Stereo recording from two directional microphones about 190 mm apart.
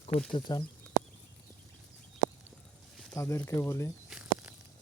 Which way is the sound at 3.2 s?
15° left (ahead or behind).